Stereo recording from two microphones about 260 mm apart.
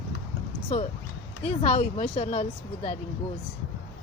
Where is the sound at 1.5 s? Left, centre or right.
Left.